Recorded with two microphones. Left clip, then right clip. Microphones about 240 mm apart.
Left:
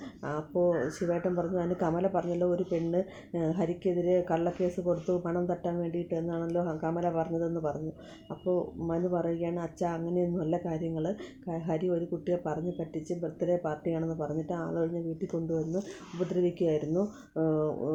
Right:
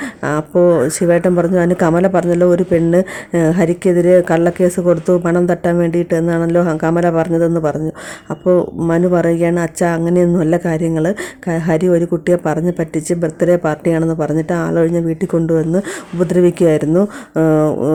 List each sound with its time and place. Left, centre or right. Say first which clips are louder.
0.3 s speech: right 16 dB; right
16.4 s speech: right 17 dB; right